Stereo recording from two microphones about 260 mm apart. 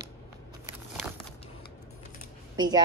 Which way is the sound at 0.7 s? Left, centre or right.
Centre.